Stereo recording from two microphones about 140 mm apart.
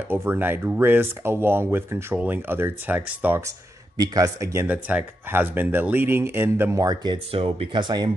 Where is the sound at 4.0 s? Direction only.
25° right (ahead or behind).